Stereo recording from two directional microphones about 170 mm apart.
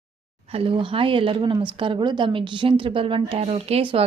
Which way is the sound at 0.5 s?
30° right (ahead or behind).